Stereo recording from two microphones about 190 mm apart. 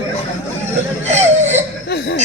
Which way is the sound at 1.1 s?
35° right (ahead or behind).